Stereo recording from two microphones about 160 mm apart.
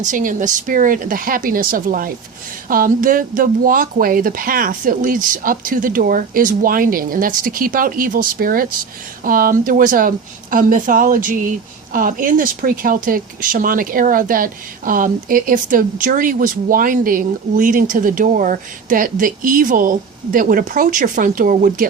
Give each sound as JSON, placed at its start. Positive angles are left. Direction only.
{"t": 0.0, "sound": "speech", "side_deg": -55}